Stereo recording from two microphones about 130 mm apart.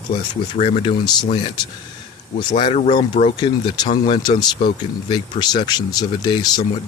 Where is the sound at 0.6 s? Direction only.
50° left (ahead or behind).